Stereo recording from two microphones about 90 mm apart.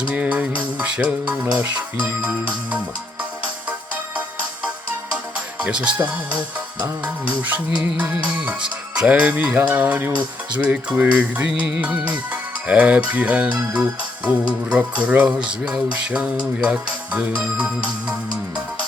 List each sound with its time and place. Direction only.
0.0 s speech: 15° right (ahead or behind)
5.6 s speech: 15° right (ahead or behind)
7.8 s speech: 5° right (ahead or behind)